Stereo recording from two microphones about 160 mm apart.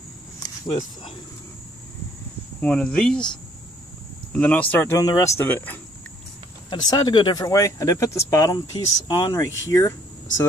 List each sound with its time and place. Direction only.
2.6 s speech: 5° left (ahead or behind)
4.3 s speech: 10° left (ahead or behind)
6.7 s speech: 25° left (ahead or behind)